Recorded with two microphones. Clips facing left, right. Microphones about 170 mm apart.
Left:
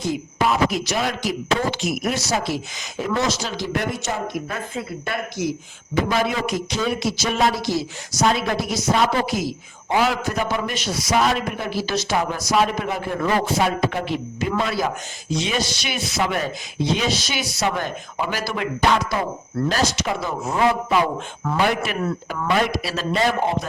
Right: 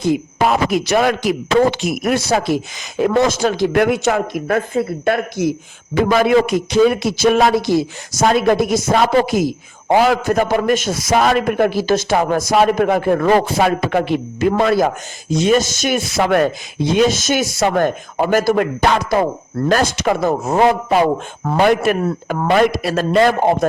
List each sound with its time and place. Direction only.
0.0 s a man's voice: 60° right (ahead or behind)